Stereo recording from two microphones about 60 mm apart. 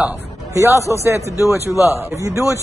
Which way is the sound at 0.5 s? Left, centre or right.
Right.